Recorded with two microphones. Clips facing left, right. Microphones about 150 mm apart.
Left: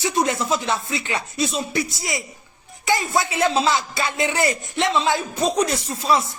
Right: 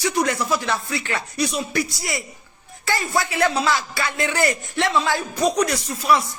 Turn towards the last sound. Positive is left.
turn(degrees=25)  # may be behind; listen again after turning